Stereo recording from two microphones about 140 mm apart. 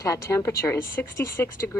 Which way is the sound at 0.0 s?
25° left (ahead or behind).